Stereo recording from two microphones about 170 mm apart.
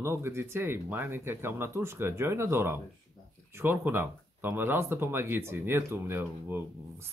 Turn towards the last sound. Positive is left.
turn(degrees=-15)  # may be behind; listen again after turning